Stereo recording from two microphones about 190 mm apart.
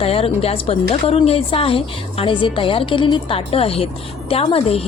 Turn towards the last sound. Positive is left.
turn(degrees=30)  # may be behind; listen again after turning